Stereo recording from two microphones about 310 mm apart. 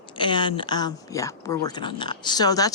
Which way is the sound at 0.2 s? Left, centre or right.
Centre.